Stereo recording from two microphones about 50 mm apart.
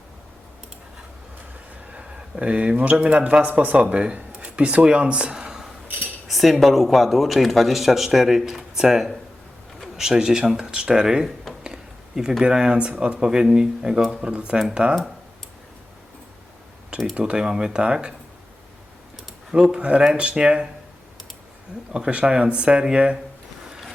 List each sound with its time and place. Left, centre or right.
1.9 s a sound: right
2.3 s speech: right
11.6 s a sound: centre
12.4 s speech: centre
14.3 s speech: right
16.9 s speech: right
19.7 s speech: right
21.9 s speech: right